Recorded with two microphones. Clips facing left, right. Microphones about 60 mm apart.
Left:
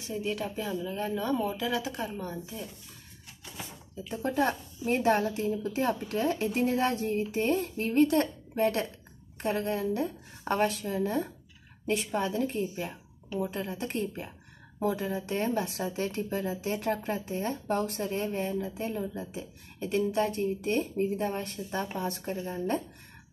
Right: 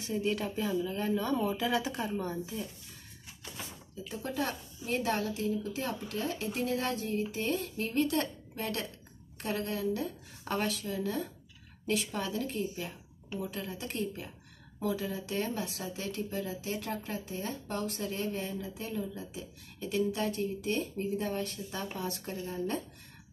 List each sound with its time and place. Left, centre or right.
0.0 s speech: centre
4.1 s a woman's voice: left